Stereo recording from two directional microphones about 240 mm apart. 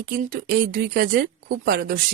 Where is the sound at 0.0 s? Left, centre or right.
Right.